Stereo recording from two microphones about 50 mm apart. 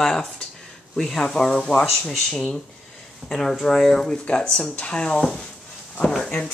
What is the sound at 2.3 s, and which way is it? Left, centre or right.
Speech, centre.